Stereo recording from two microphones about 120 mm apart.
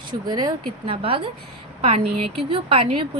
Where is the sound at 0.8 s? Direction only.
50° right (ahead or behind).